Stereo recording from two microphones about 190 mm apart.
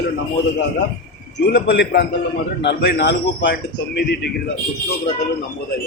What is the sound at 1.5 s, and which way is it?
A man's voice, 65° left (ahead or behind).